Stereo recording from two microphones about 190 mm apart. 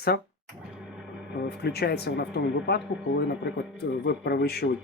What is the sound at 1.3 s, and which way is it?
Speech, 55° left (ahead or behind).